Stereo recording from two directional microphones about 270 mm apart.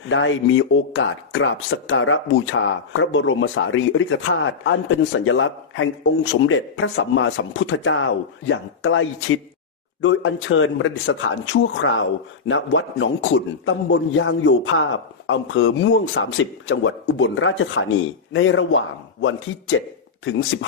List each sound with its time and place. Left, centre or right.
0.1 s speech: left